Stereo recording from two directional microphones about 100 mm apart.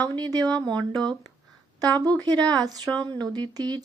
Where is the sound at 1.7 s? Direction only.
40° right (ahead or behind).